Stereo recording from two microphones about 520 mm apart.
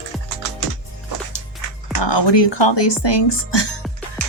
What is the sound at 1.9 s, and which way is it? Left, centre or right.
A woman's voice, left.